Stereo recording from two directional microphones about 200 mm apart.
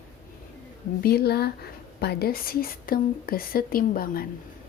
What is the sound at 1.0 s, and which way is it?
A woman's voice, 50° left (ahead or behind).